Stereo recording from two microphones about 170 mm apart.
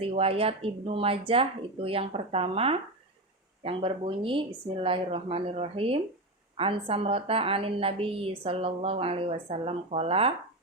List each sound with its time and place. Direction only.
0.0 s a woman's voice: 35° right (ahead or behind)